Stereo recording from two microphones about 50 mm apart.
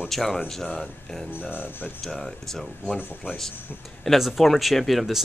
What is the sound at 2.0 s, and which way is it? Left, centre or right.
Speech, centre.